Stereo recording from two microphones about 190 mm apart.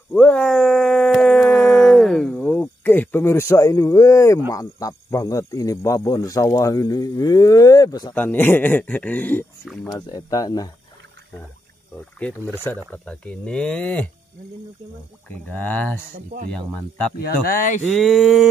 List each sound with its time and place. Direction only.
0.1 s dog: 5° left (ahead or behind)
4.5 s speech: 15° left (ahead or behind)
8.1 s speech: 10° left (ahead or behind)
9.8 s speech: 20° left (ahead or behind)
12.2 s speech: 5° left (ahead or behind)
15.2 s speech: 10° left (ahead or behind)
17.5 s a sound: 45° left (ahead or behind)
18.0 s speech: centre (ahead or behind)